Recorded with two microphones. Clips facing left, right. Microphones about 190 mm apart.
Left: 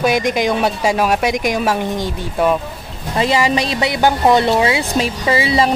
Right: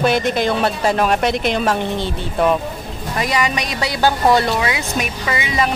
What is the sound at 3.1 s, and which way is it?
Speech, 25° left (ahead or behind).